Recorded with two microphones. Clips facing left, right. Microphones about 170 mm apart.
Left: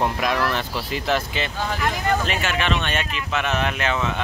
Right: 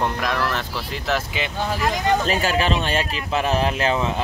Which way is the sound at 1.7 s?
35° right (ahead or behind).